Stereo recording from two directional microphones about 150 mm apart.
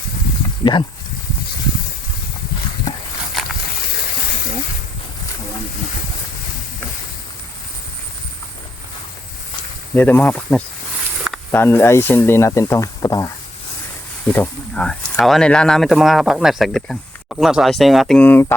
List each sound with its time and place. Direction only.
0.6 s speech: 30° left (ahead or behind)
3.4 s a sound: centre (ahead or behind)
9.9 s speech: 10° left (ahead or behind)
14.3 s speech: 10° left (ahead or behind)
18.2 s speech: 15° left (ahead or behind)